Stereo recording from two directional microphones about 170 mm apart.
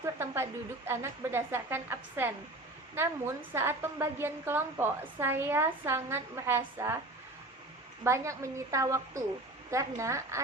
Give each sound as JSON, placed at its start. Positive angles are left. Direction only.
{"t": 0.0, "sound": "a sound", "side_deg": -15}
{"t": 0.9, "sound": "a woman's voice", "side_deg": -15}
{"t": 8.0, "sound": "a woman's voice", "side_deg": -15}